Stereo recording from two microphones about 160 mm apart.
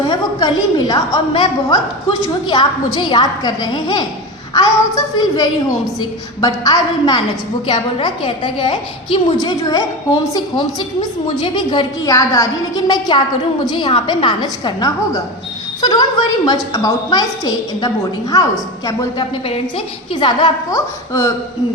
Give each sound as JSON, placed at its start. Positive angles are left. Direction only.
{"t": 0.1, "sound": "a woman's voice", "side_deg": 25}
{"t": 20.1, "sound": "a woman's voice", "side_deg": 30}